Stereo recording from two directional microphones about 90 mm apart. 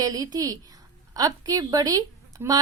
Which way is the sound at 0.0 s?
45° right (ahead or behind).